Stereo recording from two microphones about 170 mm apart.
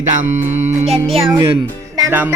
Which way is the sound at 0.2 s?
45° right (ahead or behind).